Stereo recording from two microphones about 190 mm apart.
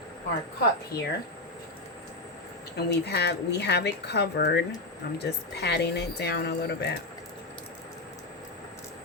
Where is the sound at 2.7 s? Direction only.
60° left (ahead or behind).